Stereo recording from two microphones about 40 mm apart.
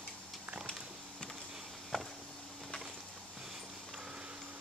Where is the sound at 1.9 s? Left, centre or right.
Centre.